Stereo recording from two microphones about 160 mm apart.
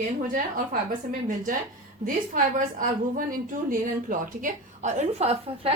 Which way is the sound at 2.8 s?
60° right (ahead or behind).